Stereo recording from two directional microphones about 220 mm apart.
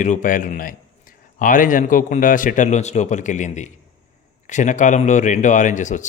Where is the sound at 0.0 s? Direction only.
35° left (ahead or behind).